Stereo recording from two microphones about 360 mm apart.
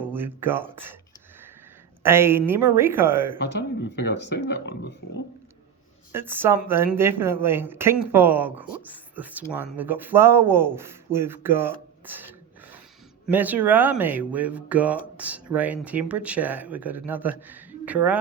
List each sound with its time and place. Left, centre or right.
0.0 s speech: centre
2.0 s speech: centre
3.3 s speech: left
6.1 s speech: centre
13.3 s speech: centre